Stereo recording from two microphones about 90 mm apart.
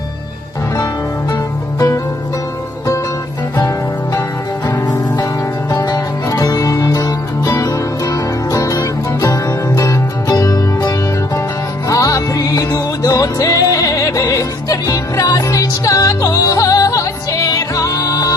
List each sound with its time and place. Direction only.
3.6 s music: 40° left (ahead or behind)